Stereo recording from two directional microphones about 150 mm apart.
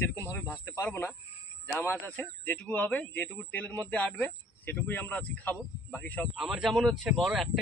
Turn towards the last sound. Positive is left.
turn(degrees=0)  # may be behind; listen again after turning